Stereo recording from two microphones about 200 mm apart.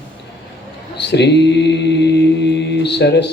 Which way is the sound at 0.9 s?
60° left (ahead or behind).